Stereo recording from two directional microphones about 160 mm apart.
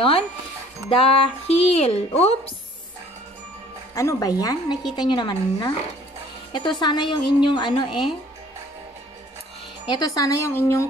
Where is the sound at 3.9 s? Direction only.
20° left (ahead or behind).